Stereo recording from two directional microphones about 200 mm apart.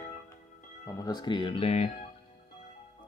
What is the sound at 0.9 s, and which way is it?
Speech, 20° left (ahead or behind).